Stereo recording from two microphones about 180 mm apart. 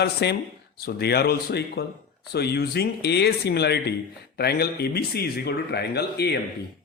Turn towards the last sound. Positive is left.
turn(degrees=65)  # may be behind; listen again after turning